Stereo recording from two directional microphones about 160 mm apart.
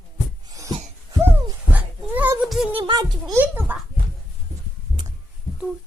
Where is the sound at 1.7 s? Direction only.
10° right (ahead or behind).